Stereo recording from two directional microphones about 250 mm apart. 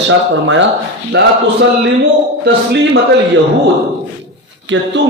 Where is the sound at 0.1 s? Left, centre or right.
Right.